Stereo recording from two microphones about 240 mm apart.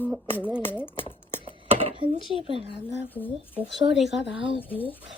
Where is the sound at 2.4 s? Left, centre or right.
Right.